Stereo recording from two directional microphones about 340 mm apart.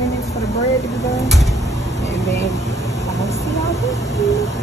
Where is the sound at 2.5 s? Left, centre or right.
Centre.